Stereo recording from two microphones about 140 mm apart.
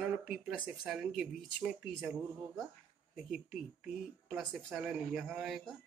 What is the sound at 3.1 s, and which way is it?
Speech, 5° right (ahead or behind).